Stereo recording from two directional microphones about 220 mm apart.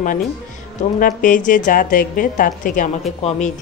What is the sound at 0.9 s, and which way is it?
Speech, 35° left (ahead or behind).